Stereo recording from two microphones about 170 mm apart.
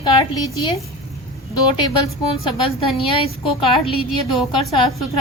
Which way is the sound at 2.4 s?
30° left (ahead or behind).